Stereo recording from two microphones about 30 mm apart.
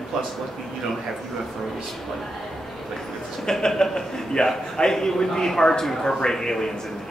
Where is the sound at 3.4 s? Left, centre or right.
Centre.